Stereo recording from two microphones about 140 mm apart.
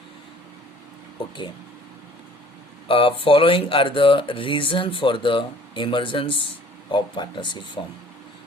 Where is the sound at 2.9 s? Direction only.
40° left (ahead or behind).